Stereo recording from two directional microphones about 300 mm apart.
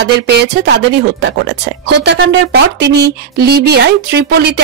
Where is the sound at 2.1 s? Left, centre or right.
Right.